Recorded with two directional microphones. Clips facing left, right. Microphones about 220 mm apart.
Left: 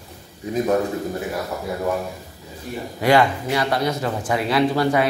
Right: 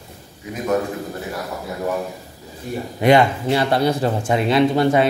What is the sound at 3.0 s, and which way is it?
Speech, 20° right (ahead or behind).